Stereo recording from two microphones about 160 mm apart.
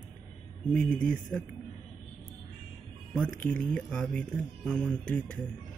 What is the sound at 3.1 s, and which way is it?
Speech, 5° left (ahead or behind).